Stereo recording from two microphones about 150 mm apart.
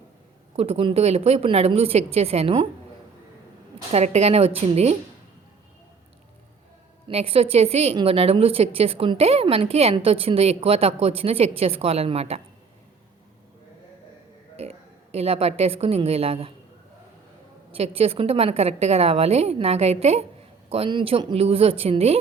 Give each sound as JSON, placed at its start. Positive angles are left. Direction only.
{"t": 0.5, "sound": "a woman's voice", "side_deg": -40}
{"t": 3.9, "sound": "a woman's voice", "side_deg": -45}
{"t": 7.1, "sound": "a woman's voice", "side_deg": -40}
{"t": 14.5, "sound": "a woman's voice", "side_deg": -45}
{"t": 17.7, "sound": "a woman's voice", "side_deg": -40}